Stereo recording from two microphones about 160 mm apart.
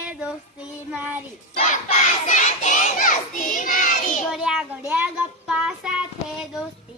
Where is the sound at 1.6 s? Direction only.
45° left (ahead or behind).